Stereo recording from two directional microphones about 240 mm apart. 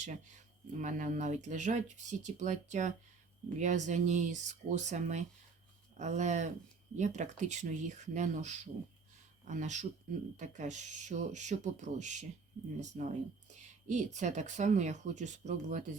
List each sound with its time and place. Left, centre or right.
0.0 s speech: right